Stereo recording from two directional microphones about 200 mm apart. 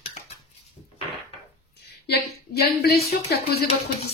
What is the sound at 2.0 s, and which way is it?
Speech, 55° left (ahead or behind).